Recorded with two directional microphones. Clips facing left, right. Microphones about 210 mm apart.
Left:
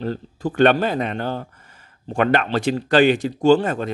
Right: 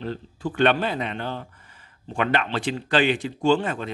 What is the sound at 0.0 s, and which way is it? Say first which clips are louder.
A man's voice: left 5 dB; 40° left (ahead or behind).